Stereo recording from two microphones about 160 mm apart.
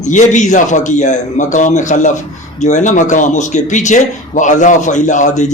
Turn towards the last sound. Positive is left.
turn(degrees=50)  # may be behind; listen again after turning